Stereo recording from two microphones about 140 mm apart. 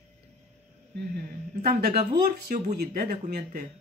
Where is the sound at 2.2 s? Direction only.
65° right (ahead or behind); by 3.6 s 90° right.